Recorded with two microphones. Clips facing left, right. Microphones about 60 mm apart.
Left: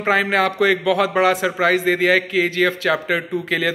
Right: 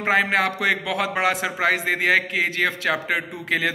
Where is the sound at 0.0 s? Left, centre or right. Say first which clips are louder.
Left 2 dB; right.